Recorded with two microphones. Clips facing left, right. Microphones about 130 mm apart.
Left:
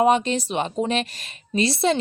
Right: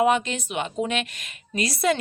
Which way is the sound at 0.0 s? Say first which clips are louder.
Left 3 dB; 35° left (ahead or behind).